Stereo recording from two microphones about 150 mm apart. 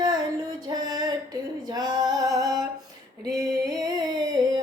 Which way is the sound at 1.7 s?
25° right (ahead or behind).